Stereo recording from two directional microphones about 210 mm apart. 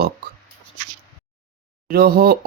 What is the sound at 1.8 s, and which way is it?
Speech, 45° right (ahead or behind).